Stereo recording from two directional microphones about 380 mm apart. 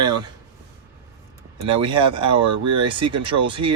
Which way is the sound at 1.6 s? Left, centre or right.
Centre.